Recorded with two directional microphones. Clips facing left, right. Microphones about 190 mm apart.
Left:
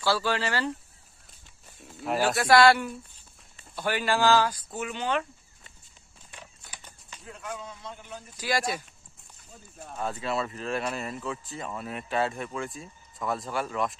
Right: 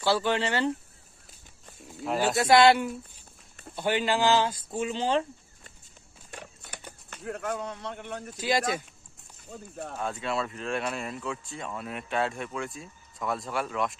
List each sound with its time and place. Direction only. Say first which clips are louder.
0.0 s speech: right 1 dB; 20° right (ahead or behind)
1.8 s a sound: left 1 dB; centre (ahead or behind)
2.2 s speech: even; 20° right (ahead or behind)
6.3 s a sound: right 5 dB; 65° right (ahead or behind)
7.1 s speech: right 7 dB; 60° right (ahead or behind)
8.4 s speech: right 2 dB; 20° right (ahead or behind)
9.5 s speech: right 7 dB; 70° right (ahead or behind)
9.9 s speech: left 1 dB; centre (ahead or behind)